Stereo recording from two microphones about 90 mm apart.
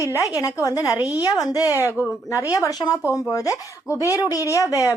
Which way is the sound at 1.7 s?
35° left (ahead or behind).